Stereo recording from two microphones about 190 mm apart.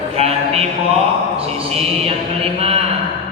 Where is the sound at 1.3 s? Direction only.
30° right (ahead or behind).